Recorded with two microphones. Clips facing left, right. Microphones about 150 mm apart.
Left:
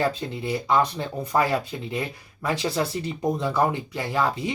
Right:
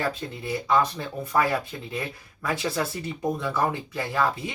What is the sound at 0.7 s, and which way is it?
Speech, 20° left (ahead or behind).